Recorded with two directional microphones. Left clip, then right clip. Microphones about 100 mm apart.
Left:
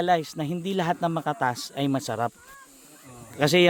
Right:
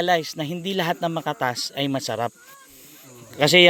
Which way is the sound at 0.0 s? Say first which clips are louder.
Right 2 dB; 30° left (ahead or behind).